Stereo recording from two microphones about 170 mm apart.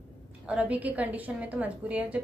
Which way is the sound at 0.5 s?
10° right (ahead or behind).